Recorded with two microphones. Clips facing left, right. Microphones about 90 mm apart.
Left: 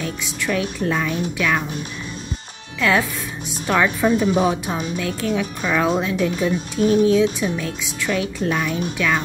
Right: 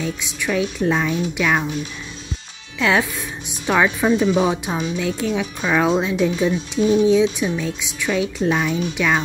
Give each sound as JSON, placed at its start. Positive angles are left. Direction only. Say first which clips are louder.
{"t": 0.0, "sound": "speech", "louder": "right 1 dB", "side_deg": -15}
{"t": 2.8, "sound": "speech", "louder": "even", "side_deg": -20}